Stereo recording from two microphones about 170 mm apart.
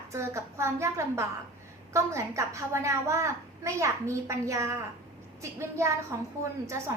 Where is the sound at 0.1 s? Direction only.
15° right (ahead or behind).